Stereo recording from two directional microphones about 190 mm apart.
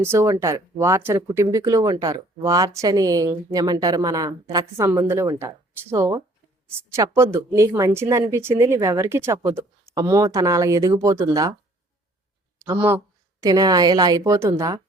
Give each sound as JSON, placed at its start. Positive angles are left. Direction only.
{"t": 0.0, "sound": "speech", "side_deg": -15}
{"t": 12.5, "sound": "a woman's voice", "side_deg": -15}